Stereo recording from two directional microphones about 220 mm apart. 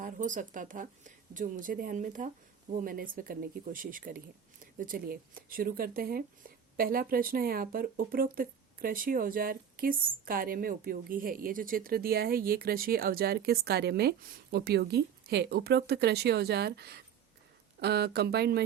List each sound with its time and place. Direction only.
0.0 s speech: 35° right (ahead or behind)